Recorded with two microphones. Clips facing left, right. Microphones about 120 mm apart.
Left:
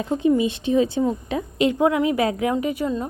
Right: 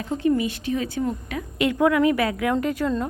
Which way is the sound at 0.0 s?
20° left (ahead or behind).